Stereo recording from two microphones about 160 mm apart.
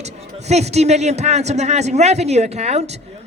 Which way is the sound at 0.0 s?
45° right (ahead or behind).